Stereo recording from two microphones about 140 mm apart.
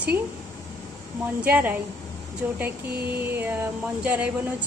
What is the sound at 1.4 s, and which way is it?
Speech, 15° right (ahead or behind).